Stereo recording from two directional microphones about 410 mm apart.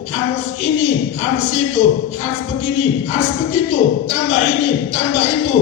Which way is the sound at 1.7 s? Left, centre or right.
Centre.